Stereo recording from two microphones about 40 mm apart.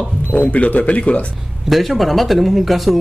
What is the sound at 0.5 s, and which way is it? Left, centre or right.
Speech, left.